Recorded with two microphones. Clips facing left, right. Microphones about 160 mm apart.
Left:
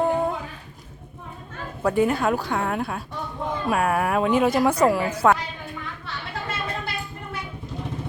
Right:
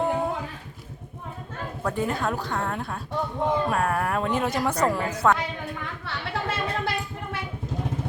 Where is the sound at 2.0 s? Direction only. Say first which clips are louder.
Left 5 dB; 10° left (ahead or behind).